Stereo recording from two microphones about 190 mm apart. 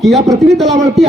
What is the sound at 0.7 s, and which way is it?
Speech, 15° right (ahead or behind).